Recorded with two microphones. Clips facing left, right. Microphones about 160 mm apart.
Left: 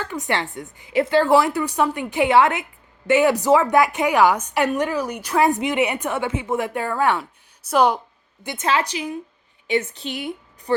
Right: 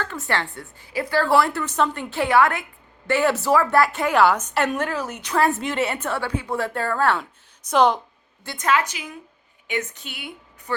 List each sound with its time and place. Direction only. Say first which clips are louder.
0.0 s a woman's voice: left 1 dB; 15° left (ahead or behind)
8.4 s a woman's voice: even; 25° left (ahead or behind)